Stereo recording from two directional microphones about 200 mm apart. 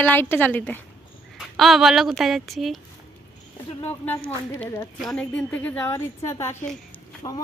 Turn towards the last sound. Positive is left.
turn(degrees=20)  # may be behind; listen again after turning